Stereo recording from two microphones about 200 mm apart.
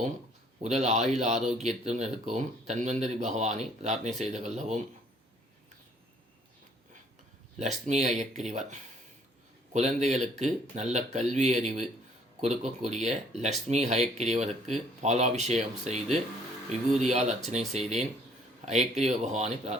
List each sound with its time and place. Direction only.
0.6 s speech: 35° right (ahead or behind)
7.6 s speech: 35° right (ahead or behind)
8.1 s speech: centre (ahead or behind)
8.4 s speech: 35° right (ahead or behind)